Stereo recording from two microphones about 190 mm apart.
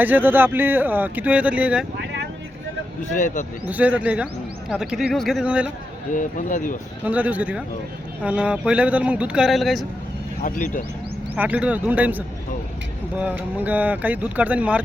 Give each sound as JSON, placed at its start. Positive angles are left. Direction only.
{"t": 0.0, "sound": "speech", "side_deg": -10}
{"t": 3.0, "sound": "speech", "side_deg": 40}
{"t": 3.7, "sound": "speech", "side_deg": -10}
{"t": 6.1, "sound": "speech", "side_deg": 45}
{"t": 7.0, "sound": "speech", "side_deg": -10}
{"t": 10.4, "sound": "speech", "side_deg": 45}
{"t": 11.3, "sound": "speech", "side_deg": -5}